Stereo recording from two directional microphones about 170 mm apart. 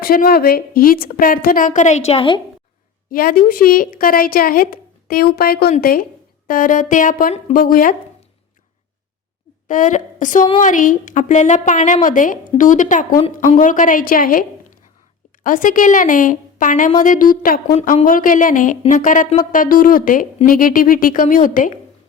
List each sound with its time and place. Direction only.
0.0 s a woman's voice: 60° left (ahead or behind); by 2.4 s 30° left (ahead or behind)
3.1 s a woman's voice: 60° left (ahead or behind)
9.6 s a woman's voice: 50° left (ahead or behind)
15.4 s a woman's voice: 50° left (ahead or behind)